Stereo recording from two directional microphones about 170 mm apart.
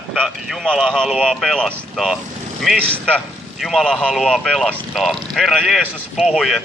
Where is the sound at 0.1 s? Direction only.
Centre (ahead or behind).